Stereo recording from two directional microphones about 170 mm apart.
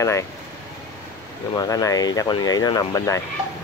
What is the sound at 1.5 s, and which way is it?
Speech, 20° left (ahead or behind).